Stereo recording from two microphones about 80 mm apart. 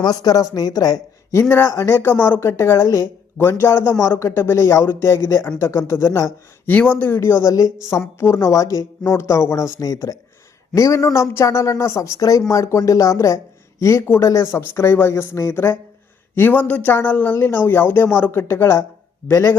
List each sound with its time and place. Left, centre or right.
0.0 s a woman's voice: left
1.3 s speech: left
6.9 s speech: left
7.4 s speech: left
9.8 s speech: left